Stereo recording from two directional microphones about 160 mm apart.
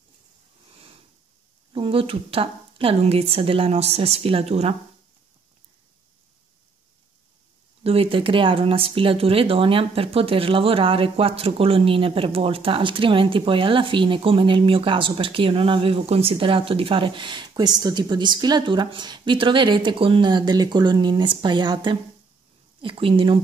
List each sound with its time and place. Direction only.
1.7 s speech: 35° right (ahead or behind)
7.8 s speech: 35° right (ahead or behind)